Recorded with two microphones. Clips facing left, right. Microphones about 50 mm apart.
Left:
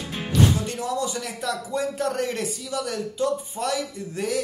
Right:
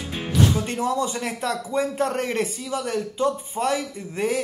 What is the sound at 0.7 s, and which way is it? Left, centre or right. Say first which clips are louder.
A man's voice: right 3 dB; right.